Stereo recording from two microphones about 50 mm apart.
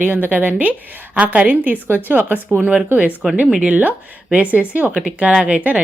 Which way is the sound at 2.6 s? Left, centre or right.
Right.